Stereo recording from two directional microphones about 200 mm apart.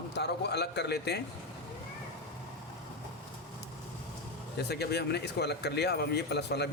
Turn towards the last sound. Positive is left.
turn(degrees=55)  # may be behind; listen again after turning